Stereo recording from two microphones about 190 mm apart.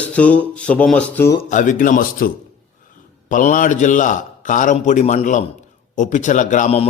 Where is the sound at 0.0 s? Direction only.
5° left (ahead or behind).